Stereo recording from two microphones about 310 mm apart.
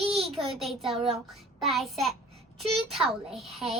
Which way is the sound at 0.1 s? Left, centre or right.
Centre.